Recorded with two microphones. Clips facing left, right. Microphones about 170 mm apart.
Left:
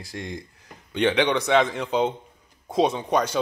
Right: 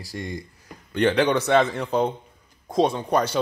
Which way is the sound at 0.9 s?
Centre (ahead or behind).